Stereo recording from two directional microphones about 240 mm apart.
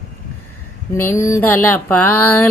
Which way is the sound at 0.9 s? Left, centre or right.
Centre.